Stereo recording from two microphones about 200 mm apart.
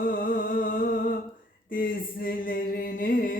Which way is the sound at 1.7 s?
45° left (ahead or behind).